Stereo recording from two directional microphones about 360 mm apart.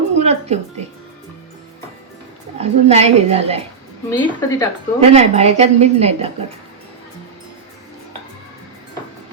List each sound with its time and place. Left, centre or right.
0.2 s a sound: centre
2.6 s a woman's voice: centre
4.1 s a woman's voice: centre
4.9 s a woman's voice: centre